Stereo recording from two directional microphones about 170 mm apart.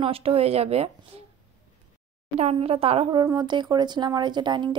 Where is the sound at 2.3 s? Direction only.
35° right (ahead or behind).